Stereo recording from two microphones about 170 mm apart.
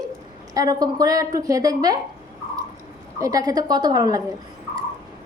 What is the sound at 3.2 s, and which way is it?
A woman's voice, 20° right (ahead or behind).